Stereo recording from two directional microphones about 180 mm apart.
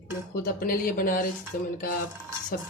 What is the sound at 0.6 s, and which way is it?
Speech, 50° left (ahead or behind).